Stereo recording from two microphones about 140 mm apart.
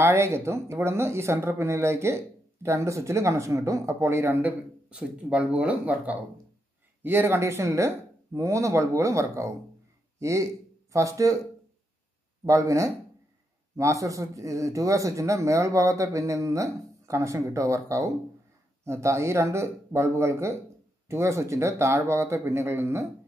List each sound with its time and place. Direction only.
0.0 s speech: 20° right (ahead or behind)
12.4 s speech: 20° right (ahead or behind)